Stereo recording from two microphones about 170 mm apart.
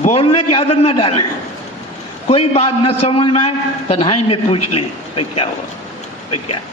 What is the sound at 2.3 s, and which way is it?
A man's voice, 35° left (ahead or behind).